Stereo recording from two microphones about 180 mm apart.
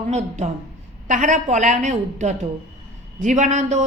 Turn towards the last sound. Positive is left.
turn(degrees=-40)  # may be behind; listen again after turning